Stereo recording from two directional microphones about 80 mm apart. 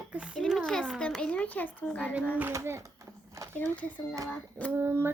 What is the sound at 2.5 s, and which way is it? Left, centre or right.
Speech, right.